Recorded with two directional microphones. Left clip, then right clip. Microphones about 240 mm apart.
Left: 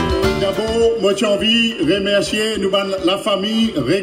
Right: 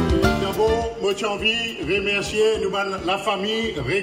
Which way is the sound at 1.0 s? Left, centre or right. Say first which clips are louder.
Left 6 dB; left.